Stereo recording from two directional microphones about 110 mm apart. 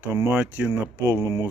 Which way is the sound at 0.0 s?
20° right (ahead or behind).